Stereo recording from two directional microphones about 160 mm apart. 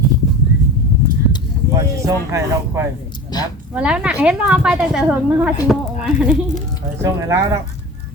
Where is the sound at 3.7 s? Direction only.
10° right (ahead or behind).